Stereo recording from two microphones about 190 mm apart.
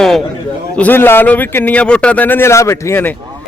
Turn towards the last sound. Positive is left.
turn(degrees=10)  # may be behind; listen again after turning